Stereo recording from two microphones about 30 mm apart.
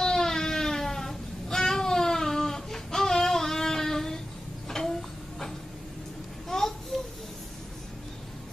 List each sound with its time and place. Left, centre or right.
0.0 s baby cry: centre
4.6 s a sound: centre
6.5 s babbling: centre